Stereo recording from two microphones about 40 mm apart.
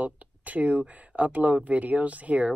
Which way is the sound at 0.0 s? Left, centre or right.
Right.